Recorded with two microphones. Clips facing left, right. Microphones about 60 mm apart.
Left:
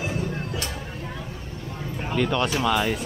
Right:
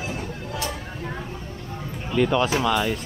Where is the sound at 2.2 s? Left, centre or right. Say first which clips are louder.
Right 3 dB; centre.